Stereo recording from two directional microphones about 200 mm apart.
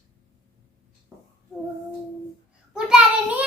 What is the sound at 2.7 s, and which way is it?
Child singing, 5° right (ahead or behind).